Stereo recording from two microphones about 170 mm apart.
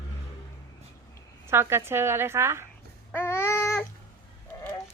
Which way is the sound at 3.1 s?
15° left (ahead or behind).